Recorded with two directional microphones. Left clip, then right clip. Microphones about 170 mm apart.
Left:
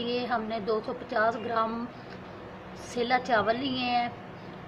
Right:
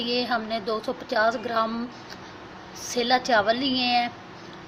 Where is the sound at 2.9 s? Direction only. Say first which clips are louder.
Right 4 dB; 45° right (ahead or behind).